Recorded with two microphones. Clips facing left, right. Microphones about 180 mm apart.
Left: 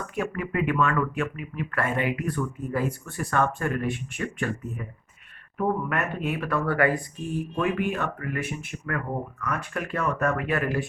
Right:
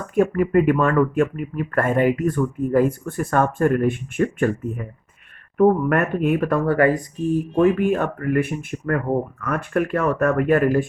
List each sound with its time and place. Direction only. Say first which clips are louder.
0.1 s speech: right 13 dB; 45° right (ahead or behind)